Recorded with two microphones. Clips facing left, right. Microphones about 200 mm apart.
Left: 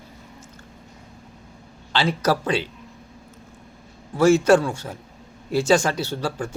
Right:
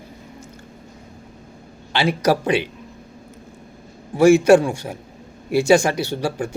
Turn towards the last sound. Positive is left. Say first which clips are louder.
# right 3 dB
turn(degrees=-15)  # may be behind; listen again after turning